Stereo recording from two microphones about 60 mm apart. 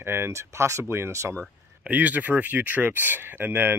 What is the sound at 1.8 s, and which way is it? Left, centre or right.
Speech, right.